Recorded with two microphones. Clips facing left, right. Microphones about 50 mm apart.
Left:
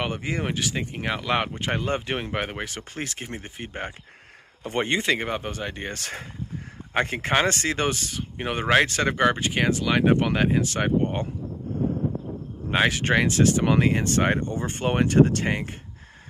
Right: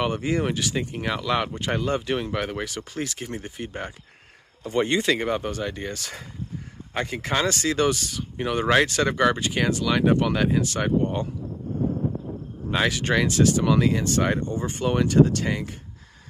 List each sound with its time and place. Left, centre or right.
0.0 s speech: centre
5.8 s speech: left
7.4 s speech: left
12.8 s speech: left
14.5 s speech: left